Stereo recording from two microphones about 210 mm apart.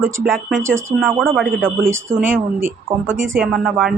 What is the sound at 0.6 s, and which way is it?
Speech, 65° right (ahead or behind).